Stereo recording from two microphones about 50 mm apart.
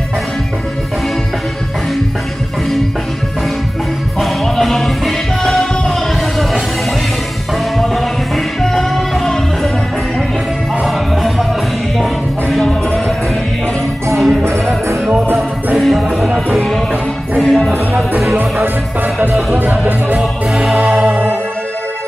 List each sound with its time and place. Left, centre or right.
4.2 s music: centre
8.6 s music: centre
10.9 s music: centre
14.1 s music: centre
18.3 s music: right
20.2 s music: centre
21.1 s music: right